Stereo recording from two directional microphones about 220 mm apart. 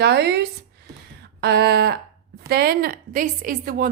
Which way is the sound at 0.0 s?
50° right (ahead or behind).